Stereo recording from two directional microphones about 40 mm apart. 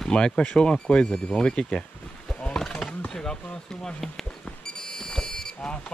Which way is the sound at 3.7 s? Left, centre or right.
Centre.